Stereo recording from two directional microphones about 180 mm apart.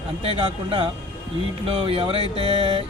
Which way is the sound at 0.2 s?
30° right (ahead or behind).